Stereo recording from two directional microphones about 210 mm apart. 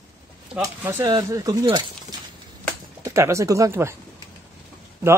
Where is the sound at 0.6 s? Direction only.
10° right (ahead or behind).